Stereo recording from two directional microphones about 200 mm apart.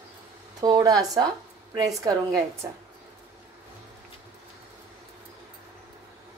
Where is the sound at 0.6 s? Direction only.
20° right (ahead or behind).